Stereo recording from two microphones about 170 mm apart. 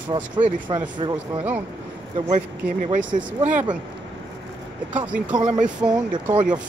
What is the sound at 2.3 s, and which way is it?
Speech, 45° right (ahead or behind).